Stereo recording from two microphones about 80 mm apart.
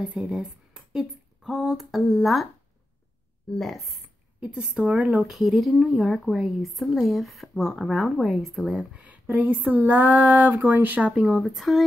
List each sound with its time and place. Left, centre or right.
0.2 s a sound: centre
1.4 s speech: centre
3.5 s speech: centre
4.4 s speech: centre
5.3 s speech: centre
8.9 s a sound: centre
11.4 s speech: centre